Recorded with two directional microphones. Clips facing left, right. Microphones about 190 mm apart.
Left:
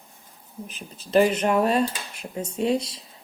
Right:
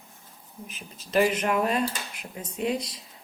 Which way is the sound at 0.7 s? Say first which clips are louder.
Left 7 dB; 35° left (ahead or behind).